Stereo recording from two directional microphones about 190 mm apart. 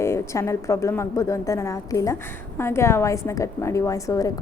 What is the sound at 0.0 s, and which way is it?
A woman's voice, 15° left (ahead or behind).